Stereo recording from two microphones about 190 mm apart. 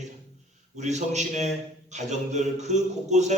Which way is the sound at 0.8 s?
35° right (ahead or behind).